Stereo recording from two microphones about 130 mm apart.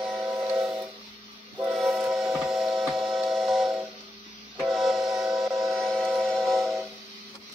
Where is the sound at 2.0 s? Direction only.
5° right (ahead or behind).